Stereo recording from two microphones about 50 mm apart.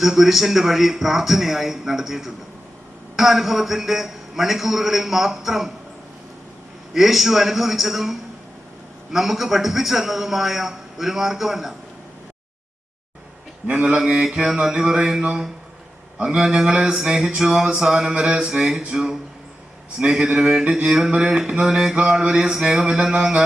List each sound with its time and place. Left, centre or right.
0.0 s a man's voice: centre
6.9 s a man's voice: centre
13.7 s mantra: centre